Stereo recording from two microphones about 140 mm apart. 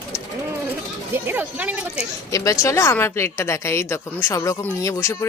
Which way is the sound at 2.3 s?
25° left (ahead or behind).